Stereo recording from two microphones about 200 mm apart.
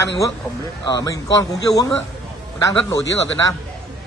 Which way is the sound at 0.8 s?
20° left (ahead or behind).